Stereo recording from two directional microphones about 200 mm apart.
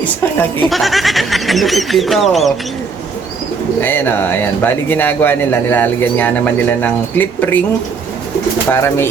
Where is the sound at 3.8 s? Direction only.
10° left (ahead or behind).